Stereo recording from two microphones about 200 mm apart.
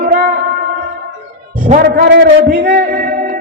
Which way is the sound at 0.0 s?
40° right (ahead or behind).